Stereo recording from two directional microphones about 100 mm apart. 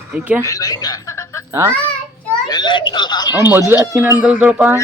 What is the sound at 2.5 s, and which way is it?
Speech, 50° left (ahead or behind).